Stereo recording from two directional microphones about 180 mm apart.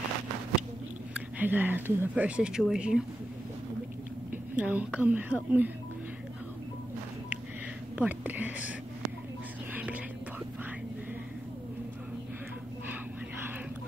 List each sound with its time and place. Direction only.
1.1 s speech: 10° right (ahead or behind)
4.3 s a woman's voice: 10° right (ahead or behind)
8.0 s speech: 10° right (ahead or behind)